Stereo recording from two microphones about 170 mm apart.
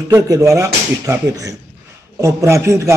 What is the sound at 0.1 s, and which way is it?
A man's voice, 20° right (ahead or behind).